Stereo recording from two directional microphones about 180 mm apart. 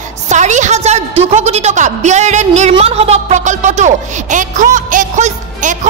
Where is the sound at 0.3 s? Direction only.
40° right (ahead or behind).